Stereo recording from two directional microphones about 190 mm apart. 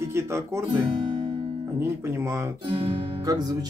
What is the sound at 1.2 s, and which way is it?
Guitar, 25° right (ahead or behind).